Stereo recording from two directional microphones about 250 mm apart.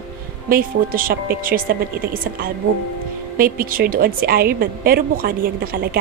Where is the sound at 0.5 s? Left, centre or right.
Right.